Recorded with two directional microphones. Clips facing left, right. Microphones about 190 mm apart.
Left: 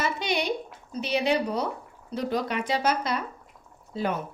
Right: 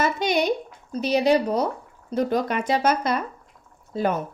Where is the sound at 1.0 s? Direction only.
40° right (ahead or behind).